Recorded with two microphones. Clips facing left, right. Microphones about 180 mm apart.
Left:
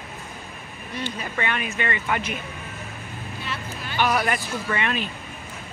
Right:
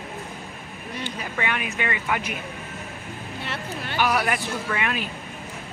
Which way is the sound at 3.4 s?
65° right (ahead or behind).